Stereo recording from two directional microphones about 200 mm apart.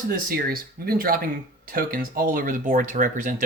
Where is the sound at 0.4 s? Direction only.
45° right (ahead or behind).